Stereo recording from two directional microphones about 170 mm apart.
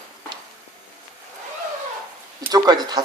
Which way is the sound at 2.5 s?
25° right (ahead or behind).